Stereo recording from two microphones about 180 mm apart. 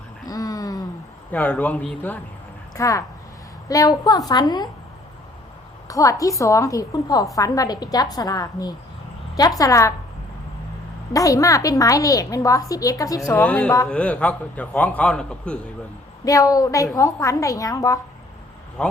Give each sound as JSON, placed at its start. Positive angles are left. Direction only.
{"t": 0.3, "sound": "a sound", "side_deg": 20}
{"t": 1.3, "sound": "a man's voice", "side_deg": 10}
{"t": 2.7, "sound": "a man's voice", "side_deg": 20}
{"t": 5.9, "sound": "a woman's voice", "side_deg": 20}
{"t": 11.1, "sound": "a woman's voice", "side_deg": 20}
{"t": 16.2, "sound": "a woman's voice", "side_deg": 20}